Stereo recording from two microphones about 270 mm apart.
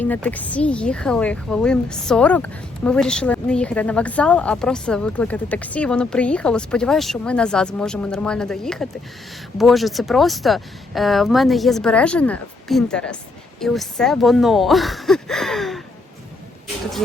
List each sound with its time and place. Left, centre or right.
0.0 s speech: centre